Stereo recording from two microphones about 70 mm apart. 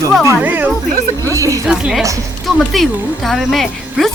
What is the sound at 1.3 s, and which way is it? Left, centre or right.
Speech, right.